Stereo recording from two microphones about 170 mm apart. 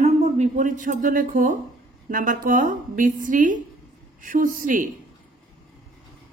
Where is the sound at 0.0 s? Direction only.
40° right (ahead or behind).